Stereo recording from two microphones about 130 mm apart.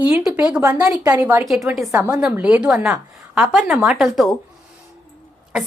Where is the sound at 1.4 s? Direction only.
5° right (ahead or behind).